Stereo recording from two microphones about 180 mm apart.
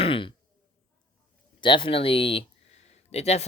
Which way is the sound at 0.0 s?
30° left (ahead or behind).